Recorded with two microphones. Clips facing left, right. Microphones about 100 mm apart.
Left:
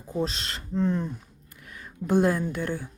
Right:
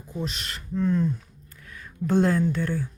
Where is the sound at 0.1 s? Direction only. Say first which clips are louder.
Left 4 dB; 35° left (ahead or behind).